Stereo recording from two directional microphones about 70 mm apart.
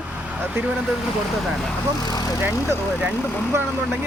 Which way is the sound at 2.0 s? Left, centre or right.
Left.